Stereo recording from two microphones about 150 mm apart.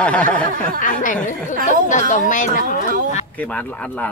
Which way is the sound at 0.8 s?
60° left (ahead or behind).